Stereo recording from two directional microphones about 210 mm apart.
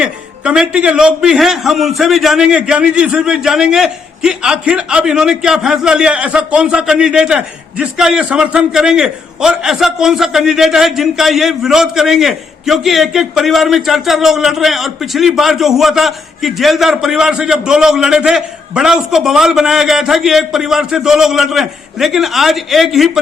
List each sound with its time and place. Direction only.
0.0 s a man's voice: 5° right (ahead or behind)